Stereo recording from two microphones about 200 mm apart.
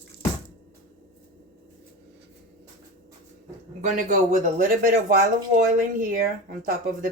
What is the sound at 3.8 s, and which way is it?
Speech, 40° right (ahead or behind).